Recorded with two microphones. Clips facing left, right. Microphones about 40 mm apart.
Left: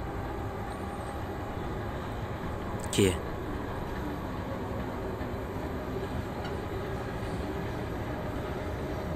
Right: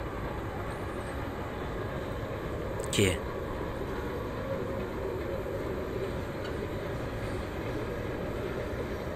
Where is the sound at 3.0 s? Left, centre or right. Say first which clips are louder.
Left 2 dB; right.